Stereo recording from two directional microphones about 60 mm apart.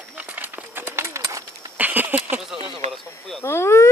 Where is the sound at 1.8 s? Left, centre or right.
Right.